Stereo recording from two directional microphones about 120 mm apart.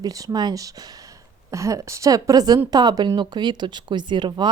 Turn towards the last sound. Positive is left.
turn(degrees=-40)  # may be behind; listen again after turning